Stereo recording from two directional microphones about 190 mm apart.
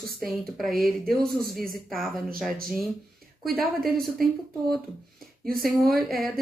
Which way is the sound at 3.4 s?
Centre (ahead or behind).